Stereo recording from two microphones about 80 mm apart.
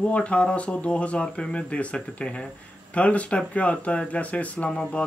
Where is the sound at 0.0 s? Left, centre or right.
Centre.